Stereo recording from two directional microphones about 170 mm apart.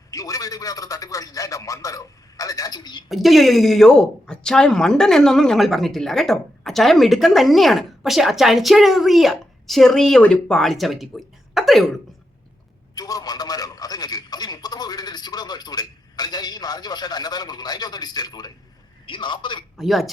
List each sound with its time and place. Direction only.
0.1 s a man's voice: 20° left (ahead or behind)
3.1 s speech: centre (ahead or behind)
12.9 s a sound: 20° left (ahead or behind)
19.0 s a man's voice: 30° left (ahead or behind)
19.7 s speech: centre (ahead or behind)